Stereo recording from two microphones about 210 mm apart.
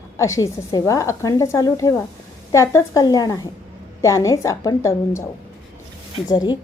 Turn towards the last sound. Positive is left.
turn(degrees=20)  # may be behind; listen again after turning